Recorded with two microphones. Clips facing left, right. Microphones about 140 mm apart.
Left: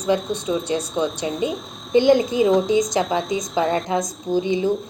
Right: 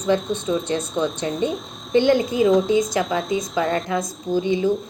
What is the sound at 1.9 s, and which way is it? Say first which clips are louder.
Speech: left 2 dB; 15° left (ahead or behind).